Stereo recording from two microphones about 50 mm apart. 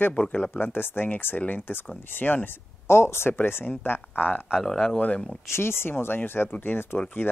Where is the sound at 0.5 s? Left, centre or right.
Left.